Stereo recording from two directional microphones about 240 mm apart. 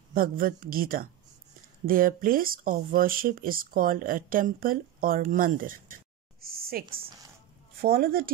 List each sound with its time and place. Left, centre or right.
0.1 s speech: right